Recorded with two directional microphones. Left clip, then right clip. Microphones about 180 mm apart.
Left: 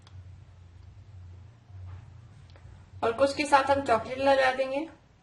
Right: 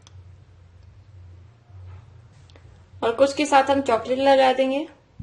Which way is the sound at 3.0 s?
25° right (ahead or behind).